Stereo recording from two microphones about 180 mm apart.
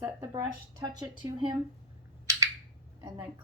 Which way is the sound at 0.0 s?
20° right (ahead or behind).